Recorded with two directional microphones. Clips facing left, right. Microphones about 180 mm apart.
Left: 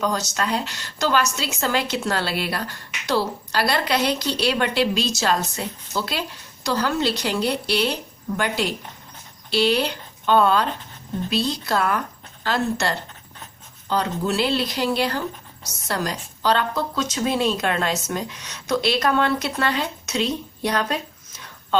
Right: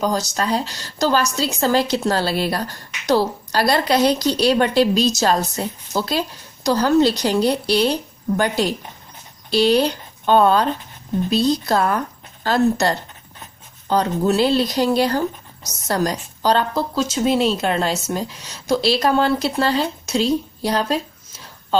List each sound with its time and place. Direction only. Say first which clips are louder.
0.0 s speech: right 3 dB; 35° right (ahead or behind)